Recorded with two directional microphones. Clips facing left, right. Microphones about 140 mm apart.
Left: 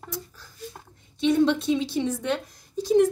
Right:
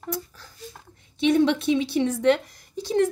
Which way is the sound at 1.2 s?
70° right (ahead or behind).